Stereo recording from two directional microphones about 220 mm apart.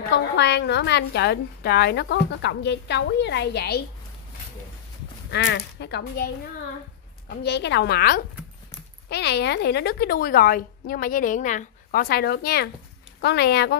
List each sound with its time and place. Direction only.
0.1 s a woman's voice: 50° left (ahead or behind)
5.3 s a woman's voice: 50° left (ahead or behind)